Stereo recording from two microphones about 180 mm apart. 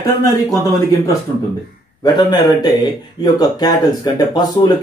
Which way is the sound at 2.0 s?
20° left (ahead or behind).